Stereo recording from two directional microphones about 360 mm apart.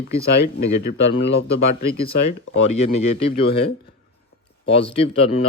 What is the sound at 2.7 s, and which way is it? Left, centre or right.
Speech, left.